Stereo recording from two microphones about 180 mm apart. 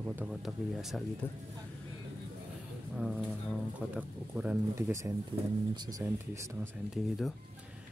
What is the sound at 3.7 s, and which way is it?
Speech, 5° right (ahead or behind).